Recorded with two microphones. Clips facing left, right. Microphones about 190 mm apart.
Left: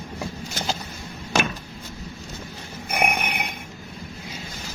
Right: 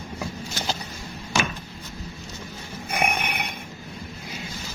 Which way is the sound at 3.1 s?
15° left (ahead or behind).